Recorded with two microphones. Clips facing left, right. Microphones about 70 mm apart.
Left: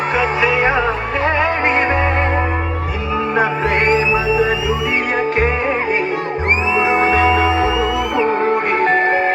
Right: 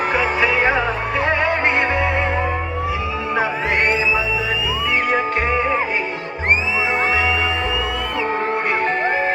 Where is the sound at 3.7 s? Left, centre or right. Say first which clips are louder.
Left 2 dB; left.